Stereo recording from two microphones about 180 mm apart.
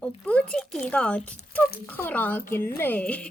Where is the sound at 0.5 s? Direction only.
5° left (ahead or behind).